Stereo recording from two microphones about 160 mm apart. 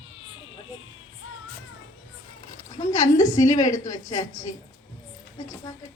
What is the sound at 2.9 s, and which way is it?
A woman's voice, 20° left (ahead or behind).